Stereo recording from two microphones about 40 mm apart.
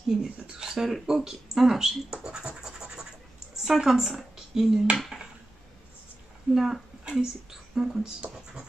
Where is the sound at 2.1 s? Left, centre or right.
Right.